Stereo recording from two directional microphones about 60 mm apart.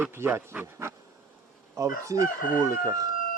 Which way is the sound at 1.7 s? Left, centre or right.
Right.